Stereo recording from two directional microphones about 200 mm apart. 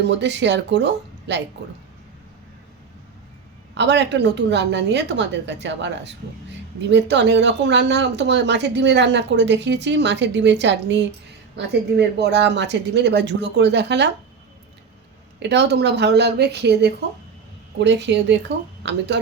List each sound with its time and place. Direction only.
0.0 s speech: 60° right (ahead or behind)
3.8 s speech: 60° right (ahead or behind)
15.4 s speech: 55° right (ahead or behind)